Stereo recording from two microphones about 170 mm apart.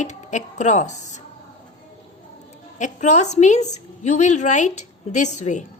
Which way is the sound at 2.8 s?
45° left (ahead or behind).